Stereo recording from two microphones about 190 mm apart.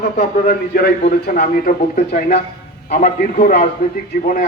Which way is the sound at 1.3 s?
50° left (ahead or behind).